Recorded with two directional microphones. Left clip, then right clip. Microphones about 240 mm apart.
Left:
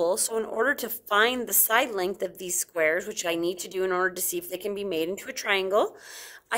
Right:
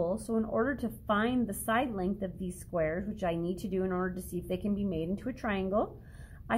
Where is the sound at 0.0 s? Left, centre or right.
Left.